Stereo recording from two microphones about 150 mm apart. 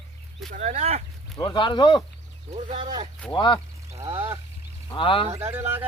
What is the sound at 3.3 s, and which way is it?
Speech, 30° left (ahead or behind).